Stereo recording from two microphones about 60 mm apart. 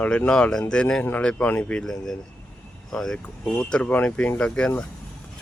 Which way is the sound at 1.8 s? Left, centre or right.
Centre.